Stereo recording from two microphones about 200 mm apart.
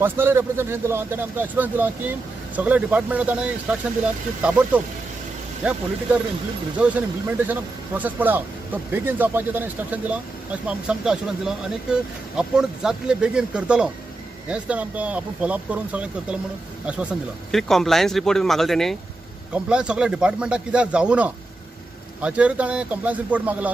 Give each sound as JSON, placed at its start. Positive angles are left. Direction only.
{"t": 0.0, "sound": "speech", "side_deg": -10}
{"t": 4.4, "sound": "speech", "side_deg": -5}